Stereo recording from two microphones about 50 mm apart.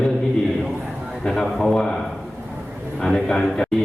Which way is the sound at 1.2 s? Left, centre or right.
Centre.